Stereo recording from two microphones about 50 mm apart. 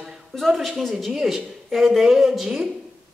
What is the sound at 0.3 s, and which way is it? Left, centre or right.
A woman's voice, centre.